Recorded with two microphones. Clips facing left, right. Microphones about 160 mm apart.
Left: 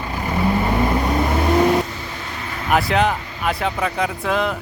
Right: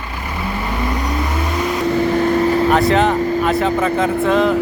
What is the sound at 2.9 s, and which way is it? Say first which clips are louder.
Speech: right 5 dB; centre (ahead or behind).